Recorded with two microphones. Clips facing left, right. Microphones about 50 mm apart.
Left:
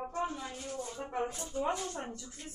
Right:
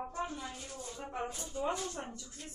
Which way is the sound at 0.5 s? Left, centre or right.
Left.